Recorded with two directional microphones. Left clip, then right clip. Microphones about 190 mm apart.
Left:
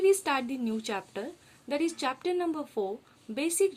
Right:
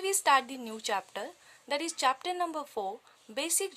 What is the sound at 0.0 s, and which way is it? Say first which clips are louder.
A woman's voice: left 1 dB; 40° right (ahead or behind).